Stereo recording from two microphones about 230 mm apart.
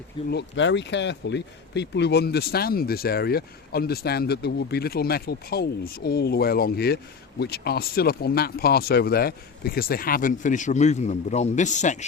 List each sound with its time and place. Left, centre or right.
0.3 s speech: left